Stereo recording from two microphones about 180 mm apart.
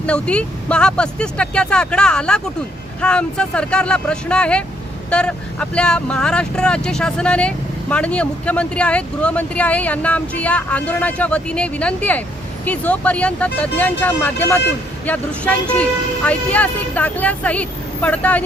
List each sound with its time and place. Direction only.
0.0 s speech: 5° left (ahead or behind)